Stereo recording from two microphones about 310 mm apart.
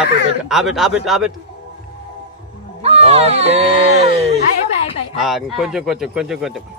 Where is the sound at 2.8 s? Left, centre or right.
Centre.